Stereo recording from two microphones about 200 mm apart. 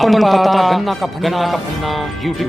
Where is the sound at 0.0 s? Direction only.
Centre (ahead or behind).